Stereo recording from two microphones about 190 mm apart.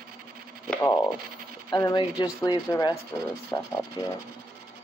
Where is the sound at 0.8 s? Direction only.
15° left (ahead or behind).